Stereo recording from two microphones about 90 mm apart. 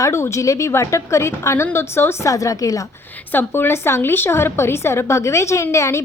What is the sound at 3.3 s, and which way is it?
A woman's voice, 25° left (ahead or behind).